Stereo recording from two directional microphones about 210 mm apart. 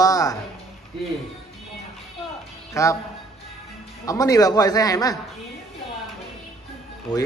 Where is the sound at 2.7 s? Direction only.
15° left (ahead or behind).